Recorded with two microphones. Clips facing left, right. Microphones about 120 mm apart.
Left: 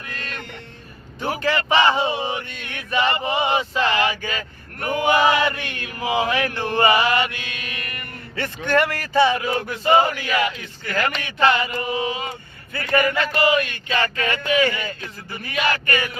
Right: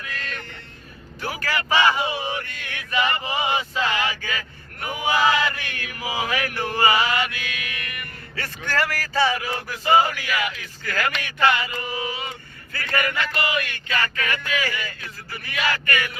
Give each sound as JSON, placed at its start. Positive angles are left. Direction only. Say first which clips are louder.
{"t": 0.1, "sound": "music", "louder": "left 1 dB", "side_deg": 20}
{"t": 1.4, "sound": "male singing", "louder": "left 3 dB", "side_deg": 25}
{"t": 5.1, "sound": "speech", "louder": "left 1 dB", "side_deg": 20}
{"t": 7.2, "sound": "mantra", "louder": "left 3 dB", "side_deg": 25}
{"t": 8.4, "sound": "speech", "louder": "left 6 dB", "side_deg": 20}